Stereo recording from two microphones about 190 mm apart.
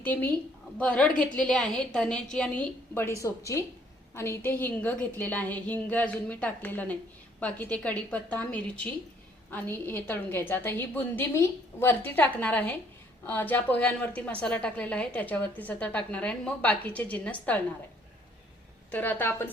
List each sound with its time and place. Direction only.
0.0 s a woman's voice: 10° left (ahead or behind)
18.9 s a woman's voice: 10° left (ahead or behind)